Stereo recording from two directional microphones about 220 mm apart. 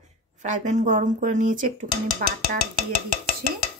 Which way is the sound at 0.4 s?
35° right (ahead or behind).